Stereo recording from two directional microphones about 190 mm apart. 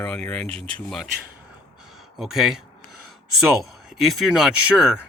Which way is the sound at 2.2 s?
Centre (ahead or behind).